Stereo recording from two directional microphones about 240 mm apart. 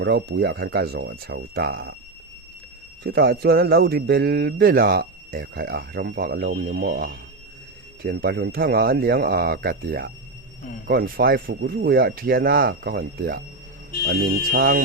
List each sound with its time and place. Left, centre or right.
0.0 s speech: right
3.0 s speech: right